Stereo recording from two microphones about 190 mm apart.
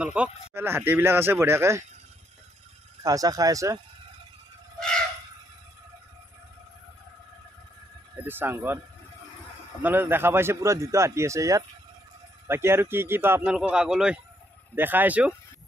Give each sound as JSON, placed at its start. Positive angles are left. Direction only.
{"t": 0.0, "sound": "speech", "side_deg": -5}
{"t": 3.0, "sound": "speech", "side_deg": -20}
{"t": 4.7, "sound": "a sound", "side_deg": 5}
{"t": 8.3, "sound": "speech", "side_deg": -10}
{"t": 9.8, "sound": "speech", "side_deg": -10}